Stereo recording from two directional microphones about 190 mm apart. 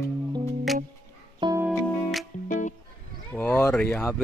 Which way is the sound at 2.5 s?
40° left (ahead or behind).